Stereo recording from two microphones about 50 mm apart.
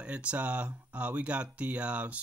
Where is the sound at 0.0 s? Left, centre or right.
Right.